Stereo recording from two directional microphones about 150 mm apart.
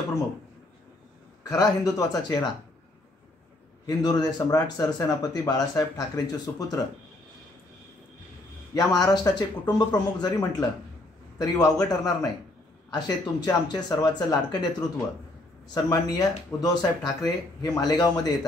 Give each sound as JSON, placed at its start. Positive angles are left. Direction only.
{"t": 1.4, "sound": "speech", "side_deg": 25}
{"t": 3.8, "sound": "speech", "side_deg": 25}
{"t": 8.7, "sound": "speech", "side_deg": 25}